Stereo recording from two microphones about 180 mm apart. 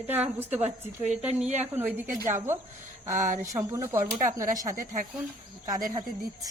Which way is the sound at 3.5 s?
15° right (ahead or behind).